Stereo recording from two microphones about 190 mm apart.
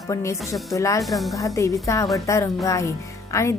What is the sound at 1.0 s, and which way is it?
Speech, centre (ahead or behind).